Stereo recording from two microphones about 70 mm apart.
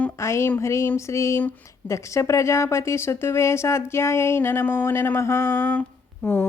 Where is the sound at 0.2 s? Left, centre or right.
Left.